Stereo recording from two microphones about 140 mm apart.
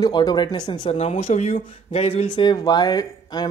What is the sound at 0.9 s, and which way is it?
Speech, 55° left (ahead or behind).